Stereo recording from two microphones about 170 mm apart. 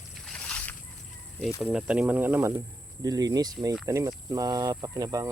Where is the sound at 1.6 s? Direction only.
5° right (ahead or behind).